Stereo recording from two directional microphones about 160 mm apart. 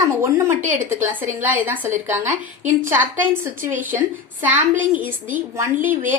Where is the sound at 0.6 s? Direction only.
55° right (ahead or behind).